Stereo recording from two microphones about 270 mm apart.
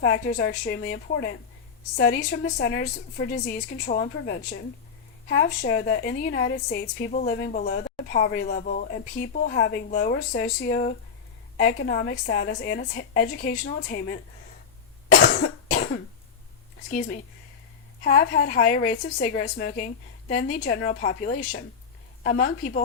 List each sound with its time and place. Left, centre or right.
0.0 s a woman's voice: left
15.2 s cough: left
16.9 s a woman's voice: left